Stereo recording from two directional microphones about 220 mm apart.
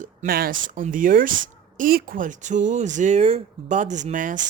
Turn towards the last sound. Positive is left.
turn(degrees=-35)  # may be behind; listen again after turning